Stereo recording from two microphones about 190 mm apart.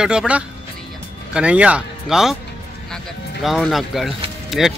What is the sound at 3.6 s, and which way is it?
Speech, centre (ahead or behind).